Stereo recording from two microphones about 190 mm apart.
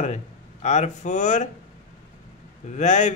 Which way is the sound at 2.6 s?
40° left (ahead or behind).